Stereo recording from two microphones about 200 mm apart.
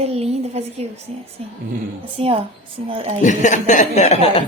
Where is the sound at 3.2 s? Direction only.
40° left (ahead or behind).